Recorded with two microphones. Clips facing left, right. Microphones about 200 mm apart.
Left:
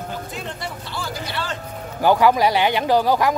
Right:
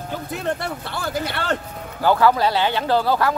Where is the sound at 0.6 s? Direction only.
60° right (ahead or behind).